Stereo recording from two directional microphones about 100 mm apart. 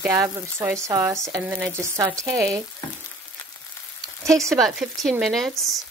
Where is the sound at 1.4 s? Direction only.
20° right (ahead or behind).